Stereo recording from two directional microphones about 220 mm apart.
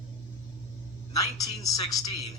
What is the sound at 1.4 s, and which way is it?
Speech, 15° left (ahead or behind).